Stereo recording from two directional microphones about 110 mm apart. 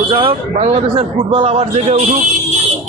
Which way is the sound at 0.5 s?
75° right (ahead or behind).